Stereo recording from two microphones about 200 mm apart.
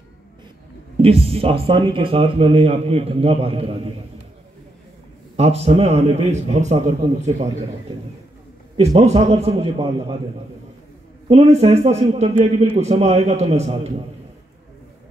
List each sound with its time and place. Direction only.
0.9 s speech: 30° right (ahead or behind)
5.3 s a man's voice: 30° right (ahead or behind)
8.7 s a man's voice: 30° right (ahead or behind)
11.2 s a man's voice: 30° right (ahead or behind)